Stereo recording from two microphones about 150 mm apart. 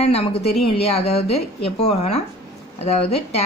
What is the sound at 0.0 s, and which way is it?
A woman's voice, 40° left (ahead or behind).